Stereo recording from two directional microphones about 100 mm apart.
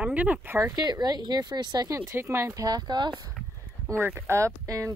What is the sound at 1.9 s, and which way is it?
Speech, 25° right (ahead or behind).